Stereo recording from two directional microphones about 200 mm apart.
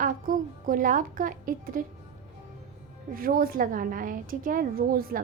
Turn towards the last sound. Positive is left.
turn(degrees=-45)  # may be behind; listen again after turning